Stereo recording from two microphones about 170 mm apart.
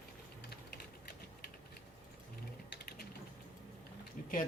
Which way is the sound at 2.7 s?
65° left (ahead or behind).